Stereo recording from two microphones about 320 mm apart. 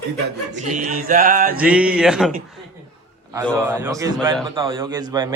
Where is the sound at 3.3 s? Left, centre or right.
Centre.